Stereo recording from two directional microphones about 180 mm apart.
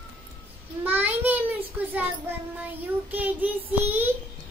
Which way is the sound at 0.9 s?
10° right (ahead or behind).